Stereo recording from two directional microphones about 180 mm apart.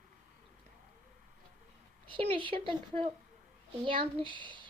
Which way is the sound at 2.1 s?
30° right (ahead or behind).